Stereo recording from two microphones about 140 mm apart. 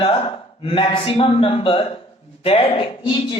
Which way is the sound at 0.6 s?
40° left (ahead or behind).